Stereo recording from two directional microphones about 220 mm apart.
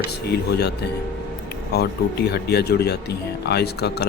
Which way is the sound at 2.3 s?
45° left (ahead or behind).